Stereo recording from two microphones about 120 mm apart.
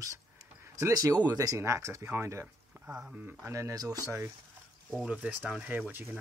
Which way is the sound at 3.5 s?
25° right (ahead or behind).